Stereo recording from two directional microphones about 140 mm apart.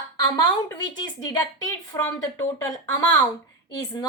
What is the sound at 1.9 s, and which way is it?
Speech, 25° left (ahead or behind).